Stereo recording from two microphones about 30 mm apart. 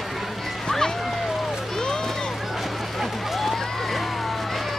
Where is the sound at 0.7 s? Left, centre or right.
Centre.